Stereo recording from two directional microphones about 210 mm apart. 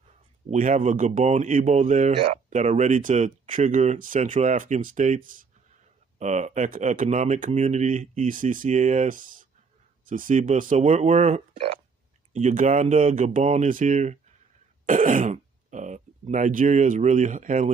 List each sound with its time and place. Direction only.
0.5 s speech: 40° right (ahead or behind)